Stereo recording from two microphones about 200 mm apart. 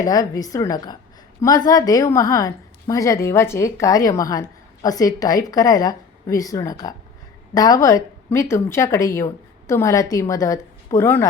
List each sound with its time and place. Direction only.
0.0 s a woman's voice: 20° left (ahead or behind)